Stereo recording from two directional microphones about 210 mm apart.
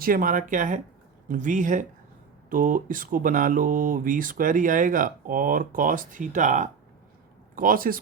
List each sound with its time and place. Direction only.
0.0 s speech: 40° right (ahead or behind)